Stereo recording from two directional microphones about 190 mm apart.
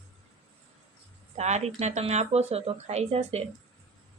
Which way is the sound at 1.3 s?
35° right (ahead or behind).